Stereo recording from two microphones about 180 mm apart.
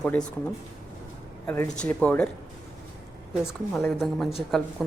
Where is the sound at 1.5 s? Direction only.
15° left (ahead or behind).